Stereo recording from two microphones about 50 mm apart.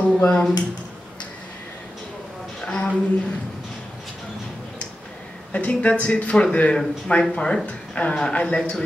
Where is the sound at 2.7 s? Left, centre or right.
Centre.